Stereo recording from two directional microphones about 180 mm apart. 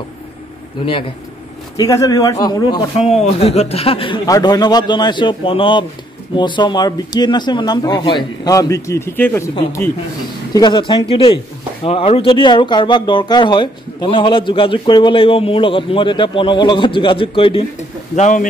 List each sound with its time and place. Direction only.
1.8 s speech: 20° left (ahead or behind)
3.0 s speech: 35° left (ahead or behind); by 9.9 s 15° left (ahead or behind)
10.5 s speech: 25° left (ahead or behind); by 18.5 s 45° left (ahead or behind)